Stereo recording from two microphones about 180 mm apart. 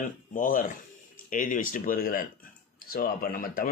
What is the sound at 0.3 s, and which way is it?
Speech, 50° left (ahead or behind).